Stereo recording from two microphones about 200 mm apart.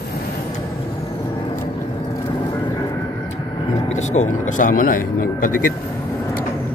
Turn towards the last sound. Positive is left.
turn(degrees=45)  # may be behind; listen again after turning